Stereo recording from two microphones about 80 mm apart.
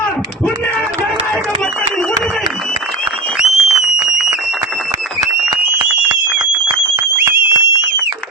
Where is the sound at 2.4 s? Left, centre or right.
Centre.